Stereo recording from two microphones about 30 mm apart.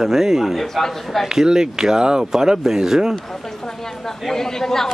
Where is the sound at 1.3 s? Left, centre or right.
Right.